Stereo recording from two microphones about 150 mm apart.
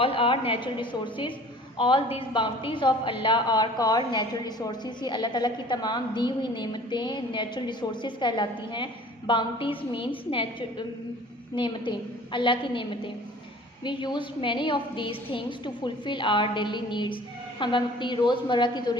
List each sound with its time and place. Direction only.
0.0 s a woman's voice: 35° left (ahead or behind)